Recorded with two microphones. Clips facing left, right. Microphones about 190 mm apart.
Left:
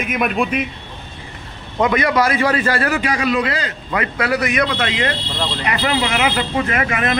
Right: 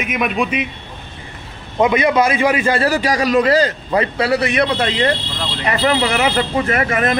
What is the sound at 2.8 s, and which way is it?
Speech, 35° right (ahead or behind).